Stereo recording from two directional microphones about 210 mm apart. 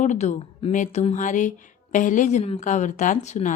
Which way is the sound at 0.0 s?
35° left (ahead or behind).